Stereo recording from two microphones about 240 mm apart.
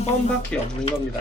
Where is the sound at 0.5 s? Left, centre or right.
Centre.